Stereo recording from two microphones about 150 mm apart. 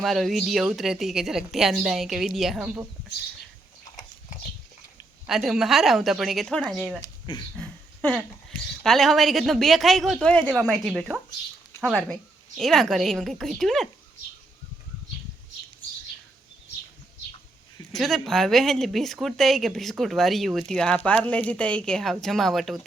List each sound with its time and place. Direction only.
0.0 s speech: centre (ahead or behind)
5.2 s speech: centre (ahead or behind)
7.0 s speech: 30° left (ahead or behind)
7.5 s speech: 5° left (ahead or behind)
17.9 s speech: centre (ahead or behind)